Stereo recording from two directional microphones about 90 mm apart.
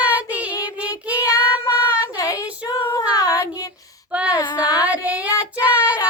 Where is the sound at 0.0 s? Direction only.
15° right (ahead or behind).